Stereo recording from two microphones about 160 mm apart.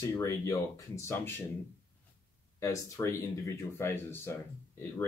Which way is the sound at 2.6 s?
20° left (ahead or behind).